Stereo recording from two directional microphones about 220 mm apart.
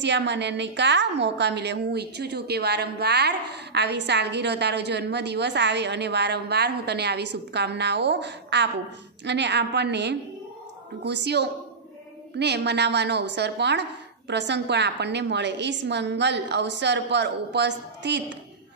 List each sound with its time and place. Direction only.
0.0 s a woman's voice: 50° right (ahead or behind)